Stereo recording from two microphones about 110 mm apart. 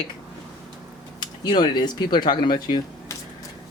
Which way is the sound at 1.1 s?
40° left (ahead or behind).